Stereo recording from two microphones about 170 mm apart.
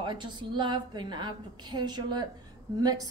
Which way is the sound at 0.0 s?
25° right (ahead or behind).